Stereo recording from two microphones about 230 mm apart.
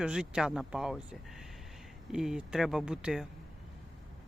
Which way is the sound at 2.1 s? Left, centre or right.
Centre.